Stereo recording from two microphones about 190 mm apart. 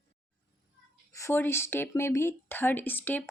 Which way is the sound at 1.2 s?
15° left (ahead or behind).